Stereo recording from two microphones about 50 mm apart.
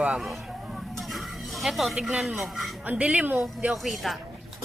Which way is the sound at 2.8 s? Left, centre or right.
Right.